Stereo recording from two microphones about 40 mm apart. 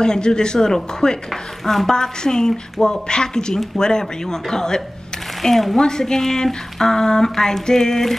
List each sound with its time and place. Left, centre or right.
0.0 s a woman's voice: centre
2.0 s a woman's voice: centre
5.4 s speech: centre
5.8 s a woman's voice: centre